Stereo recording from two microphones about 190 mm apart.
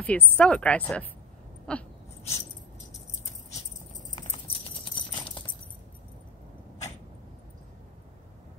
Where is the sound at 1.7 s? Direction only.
5° left (ahead or behind).